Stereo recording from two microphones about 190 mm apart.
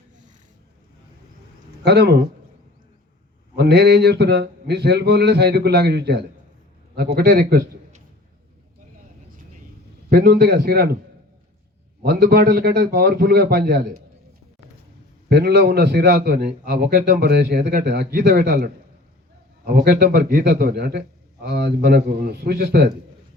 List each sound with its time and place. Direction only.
1.8 s a man's voice: 60° right (ahead or behind)
3.5 s a man's voice: 60° right (ahead or behind)
10.1 s a man's voice: 50° right (ahead or behind)
12.0 s a man's voice: 55° right (ahead or behind)
15.3 s a man's voice: 60° right (ahead or behind)